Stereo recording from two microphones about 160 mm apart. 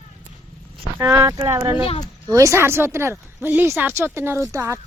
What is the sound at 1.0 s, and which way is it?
Speech, 20° right (ahead or behind).